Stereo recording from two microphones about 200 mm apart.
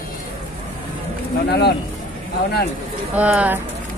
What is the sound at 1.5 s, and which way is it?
Speech, 55° left (ahead or behind).